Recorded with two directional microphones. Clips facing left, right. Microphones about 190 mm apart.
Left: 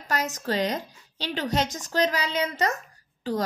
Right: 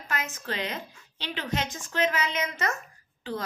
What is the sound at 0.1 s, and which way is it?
Speech, 40° left (ahead or behind).